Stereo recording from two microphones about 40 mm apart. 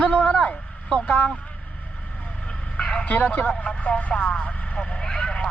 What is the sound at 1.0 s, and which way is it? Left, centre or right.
Speech, left.